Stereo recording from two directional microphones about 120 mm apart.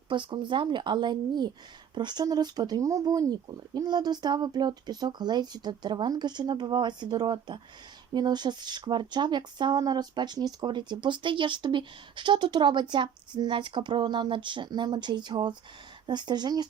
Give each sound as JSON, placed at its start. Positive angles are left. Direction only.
{"t": 0.1, "sound": "speech", "side_deg": -40}